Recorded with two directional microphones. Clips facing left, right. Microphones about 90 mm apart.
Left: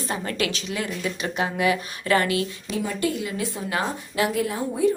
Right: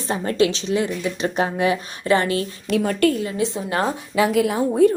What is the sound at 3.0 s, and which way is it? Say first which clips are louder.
Speech: right 7 dB; 60° right (ahead or behind).